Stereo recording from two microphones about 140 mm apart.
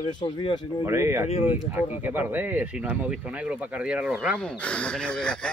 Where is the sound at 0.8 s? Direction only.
20° right (ahead or behind).